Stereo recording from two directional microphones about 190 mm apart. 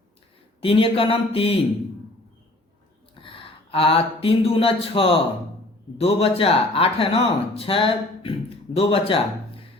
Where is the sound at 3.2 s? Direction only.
30° left (ahead or behind).